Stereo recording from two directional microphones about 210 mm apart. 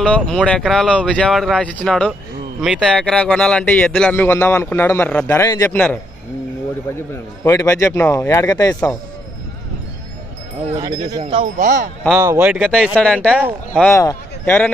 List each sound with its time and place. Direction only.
0.0 s speech: 5° left (ahead or behind)
7.4 s speech: 15° left (ahead or behind)
10.8 s speech: 20° right (ahead or behind)
11.5 s speech: 40° right (ahead or behind)
12.1 s speech: 10° right (ahead or behind)
12.6 s a man's voice: centre (ahead or behind)